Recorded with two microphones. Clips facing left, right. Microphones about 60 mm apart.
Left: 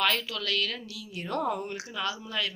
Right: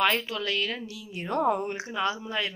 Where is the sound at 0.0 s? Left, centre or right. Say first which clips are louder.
Right 3 dB; right.